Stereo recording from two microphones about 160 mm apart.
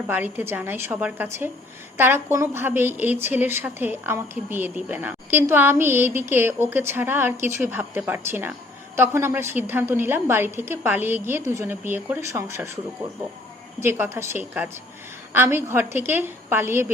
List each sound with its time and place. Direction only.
0.1 s a woman's voice: 10° right (ahead or behind)